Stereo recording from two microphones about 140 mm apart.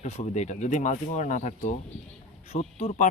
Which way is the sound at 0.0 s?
55° left (ahead or behind).